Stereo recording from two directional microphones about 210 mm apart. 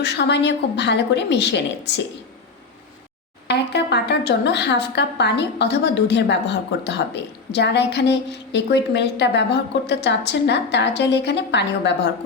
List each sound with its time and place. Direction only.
0.0 s speech: 55° left (ahead or behind)
3.4 s speech: 55° left (ahead or behind)